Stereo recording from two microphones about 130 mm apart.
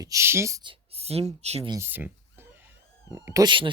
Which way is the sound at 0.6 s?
45° right (ahead or behind).